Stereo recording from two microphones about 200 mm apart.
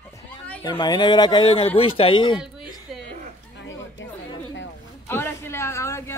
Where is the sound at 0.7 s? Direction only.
20° left (ahead or behind).